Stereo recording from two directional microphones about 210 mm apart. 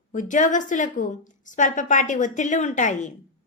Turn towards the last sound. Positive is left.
turn(degrees=35)  # may be behind; listen again after turning